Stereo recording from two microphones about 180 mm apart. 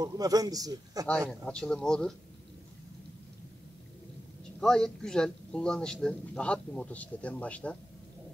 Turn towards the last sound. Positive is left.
turn(degrees=5)  # may be behind; listen again after turning